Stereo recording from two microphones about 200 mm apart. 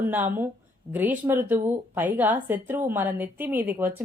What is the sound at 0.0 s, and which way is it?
Speech, 10° right (ahead or behind).